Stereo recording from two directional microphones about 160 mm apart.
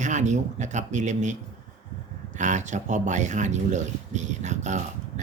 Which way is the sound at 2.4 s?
50° right (ahead or behind).